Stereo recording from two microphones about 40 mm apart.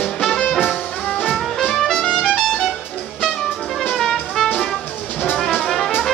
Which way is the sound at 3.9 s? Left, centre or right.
Centre.